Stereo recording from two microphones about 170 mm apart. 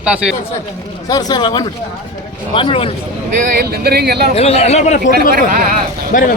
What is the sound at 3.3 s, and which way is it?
Speech, 55° right (ahead or behind).